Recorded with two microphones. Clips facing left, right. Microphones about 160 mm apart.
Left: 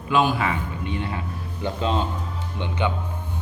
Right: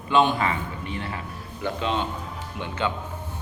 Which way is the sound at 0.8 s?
20° left (ahead or behind).